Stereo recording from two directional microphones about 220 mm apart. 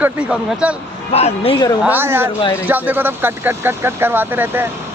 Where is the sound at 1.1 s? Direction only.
30° left (ahead or behind).